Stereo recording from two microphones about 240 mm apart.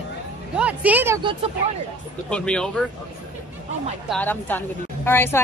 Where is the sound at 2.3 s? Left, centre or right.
Centre.